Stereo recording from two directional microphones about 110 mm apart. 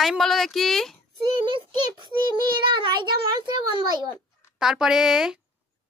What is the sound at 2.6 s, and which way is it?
A child's voice, 50° right (ahead or behind).